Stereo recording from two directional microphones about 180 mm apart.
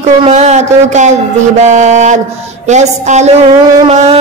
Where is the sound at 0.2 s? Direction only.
40° right (ahead or behind).